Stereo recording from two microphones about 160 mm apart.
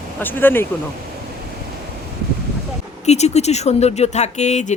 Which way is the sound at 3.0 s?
45° left (ahead or behind).